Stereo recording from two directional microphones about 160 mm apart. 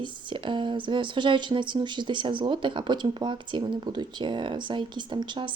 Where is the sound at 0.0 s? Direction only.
30° right (ahead or behind).